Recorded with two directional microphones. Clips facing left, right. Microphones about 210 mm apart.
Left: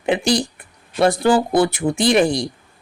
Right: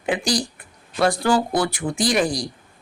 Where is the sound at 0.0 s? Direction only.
25° left (ahead or behind).